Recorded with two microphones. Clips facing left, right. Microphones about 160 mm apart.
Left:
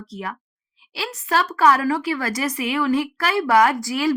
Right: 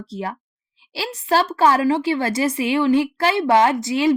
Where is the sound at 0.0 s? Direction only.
30° right (ahead or behind).